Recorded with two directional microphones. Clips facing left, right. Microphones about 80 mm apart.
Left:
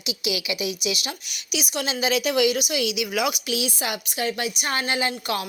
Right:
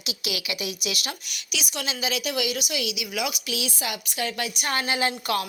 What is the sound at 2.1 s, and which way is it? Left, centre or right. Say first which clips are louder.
A woman's voice: left 7 dB; left.